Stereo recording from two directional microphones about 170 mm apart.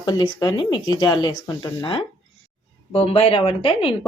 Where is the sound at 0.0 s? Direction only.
25° left (ahead or behind).